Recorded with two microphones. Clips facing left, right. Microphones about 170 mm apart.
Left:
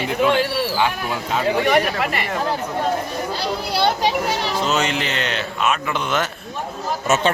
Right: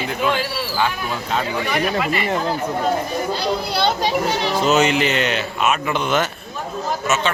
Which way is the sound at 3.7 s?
10° left (ahead or behind).